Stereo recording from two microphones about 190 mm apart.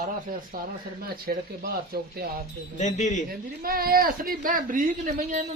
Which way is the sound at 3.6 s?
50° right (ahead or behind).